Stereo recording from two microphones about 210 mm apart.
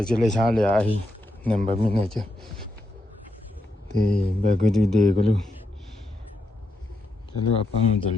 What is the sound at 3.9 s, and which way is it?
Speech, 35° right (ahead or behind).